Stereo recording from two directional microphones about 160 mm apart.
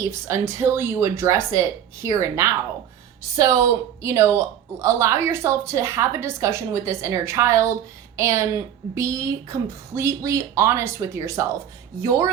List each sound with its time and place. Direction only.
0.0 s a woman's voice: 20° right (ahead or behind)